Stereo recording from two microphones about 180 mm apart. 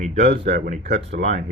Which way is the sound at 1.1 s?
80° right.